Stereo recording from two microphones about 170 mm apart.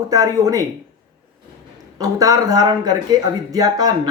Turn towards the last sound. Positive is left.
turn(degrees=-20)  # may be behind; listen again after turning